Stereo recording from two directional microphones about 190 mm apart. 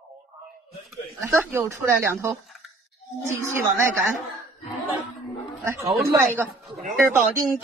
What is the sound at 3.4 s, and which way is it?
Speech, 15° right (ahead or behind).